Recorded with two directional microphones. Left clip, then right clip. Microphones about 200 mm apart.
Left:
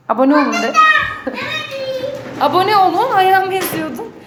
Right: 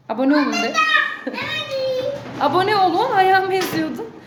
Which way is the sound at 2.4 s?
10° right (ahead or behind).